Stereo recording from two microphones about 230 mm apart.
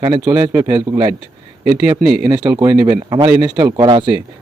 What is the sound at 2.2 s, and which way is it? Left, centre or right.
A man's voice, centre.